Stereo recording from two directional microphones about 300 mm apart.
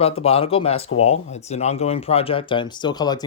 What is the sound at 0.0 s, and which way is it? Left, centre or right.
Speech, centre.